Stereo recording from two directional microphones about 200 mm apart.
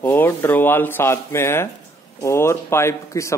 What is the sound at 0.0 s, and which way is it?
Speech, 10° left (ahead or behind).